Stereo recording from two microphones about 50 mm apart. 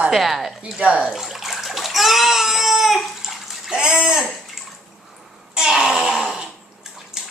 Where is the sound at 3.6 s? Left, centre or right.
Centre.